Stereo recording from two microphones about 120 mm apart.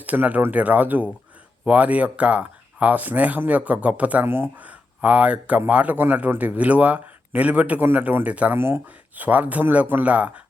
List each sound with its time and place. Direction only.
0.0 s speech: 15° right (ahead or behind)